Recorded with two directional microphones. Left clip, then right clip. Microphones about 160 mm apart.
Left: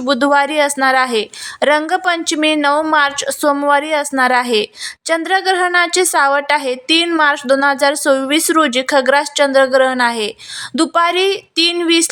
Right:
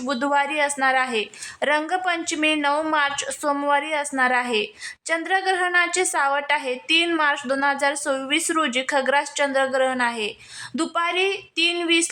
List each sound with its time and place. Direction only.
0.0 s speech: 35° left (ahead or behind)